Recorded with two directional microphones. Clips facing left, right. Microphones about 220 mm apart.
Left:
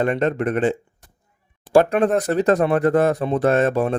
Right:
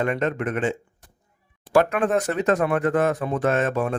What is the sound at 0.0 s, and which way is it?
Speech, 35° left (ahead or behind).